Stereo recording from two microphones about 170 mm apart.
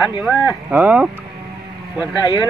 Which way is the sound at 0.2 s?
5° right (ahead or behind).